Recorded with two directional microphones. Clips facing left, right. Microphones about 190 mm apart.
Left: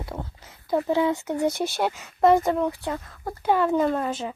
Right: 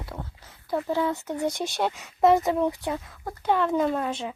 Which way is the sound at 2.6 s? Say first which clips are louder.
Even; 15° right (ahead or behind).